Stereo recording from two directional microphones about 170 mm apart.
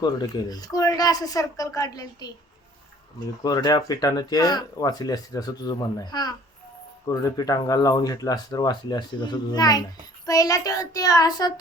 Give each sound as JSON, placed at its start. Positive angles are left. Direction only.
{"t": 0.0, "sound": "speech", "side_deg": 20}
{"t": 3.4, "sound": "speech", "side_deg": 25}